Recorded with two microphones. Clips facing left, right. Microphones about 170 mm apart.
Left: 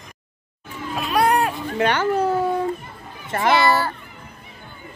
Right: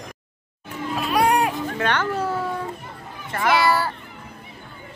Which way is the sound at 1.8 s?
15° left (ahead or behind).